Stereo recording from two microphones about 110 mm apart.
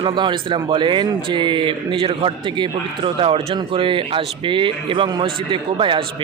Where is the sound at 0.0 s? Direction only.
45° right (ahead or behind).